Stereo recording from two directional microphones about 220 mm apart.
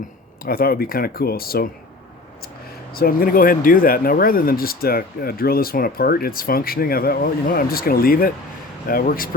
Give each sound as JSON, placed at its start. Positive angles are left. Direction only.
{"t": 0.4, "sound": "speech", "side_deg": 40}
{"t": 2.9, "sound": "speech", "side_deg": 40}